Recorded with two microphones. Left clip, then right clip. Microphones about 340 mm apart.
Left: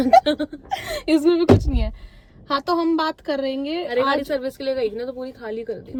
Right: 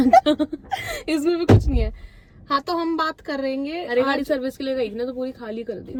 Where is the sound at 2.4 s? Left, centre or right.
Centre.